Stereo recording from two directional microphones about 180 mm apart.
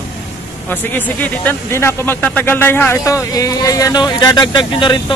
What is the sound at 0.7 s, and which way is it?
Speech, 10° left (ahead or behind).